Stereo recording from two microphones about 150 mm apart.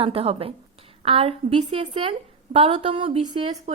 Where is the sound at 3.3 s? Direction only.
30° right (ahead or behind).